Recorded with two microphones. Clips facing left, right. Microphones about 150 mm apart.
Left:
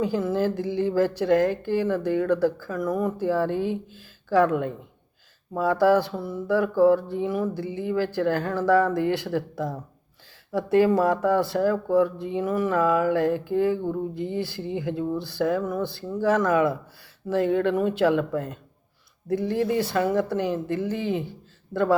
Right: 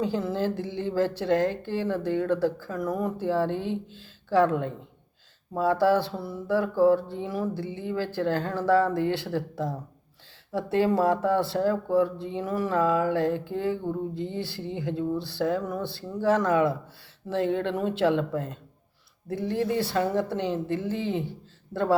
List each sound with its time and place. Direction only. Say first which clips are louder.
0.0 s a woman's voice: left 3 dB; 30° right (ahead or behind)